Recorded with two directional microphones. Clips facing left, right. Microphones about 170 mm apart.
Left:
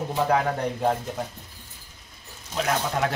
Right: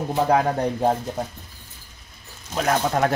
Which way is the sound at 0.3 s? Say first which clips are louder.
Right 5 dB; 35° right (ahead or behind).